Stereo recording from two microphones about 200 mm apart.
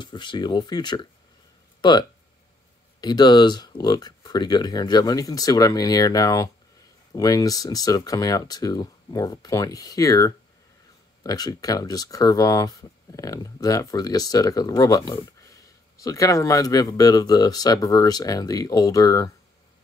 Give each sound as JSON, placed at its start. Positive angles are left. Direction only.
{"t": 0.0, "sound": "speech", "side_deg": 25}